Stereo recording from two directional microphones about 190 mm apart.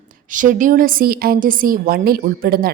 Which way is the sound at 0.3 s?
45° right (ahead or behind).